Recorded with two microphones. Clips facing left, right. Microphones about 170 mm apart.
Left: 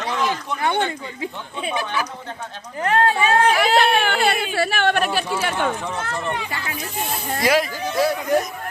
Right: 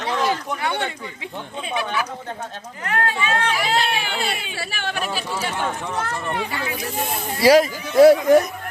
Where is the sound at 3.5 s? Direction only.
60° left (ahead or behind).